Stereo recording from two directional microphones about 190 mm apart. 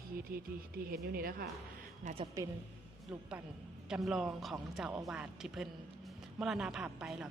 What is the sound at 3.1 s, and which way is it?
A man's voice, 5° right (ahead or behind).